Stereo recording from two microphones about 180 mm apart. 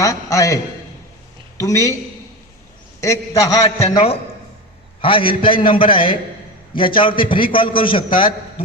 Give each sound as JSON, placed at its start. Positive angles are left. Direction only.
{"t": 0.0, "sound": "a man's voice", "side_deg": 20}
{"t": 3.0, "sound": "a man's voice", "side_deg": 15}
{"t": 3.6, "sound": "a man's voice", "side_deg": 35}